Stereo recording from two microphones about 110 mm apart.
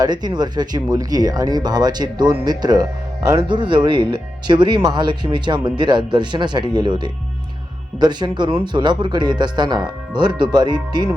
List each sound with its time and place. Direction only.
0.0 s speech: 40° right (ahead or behind)